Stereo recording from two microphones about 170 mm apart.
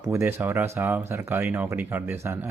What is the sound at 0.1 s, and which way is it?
Speech, 15° right (ahead or behind).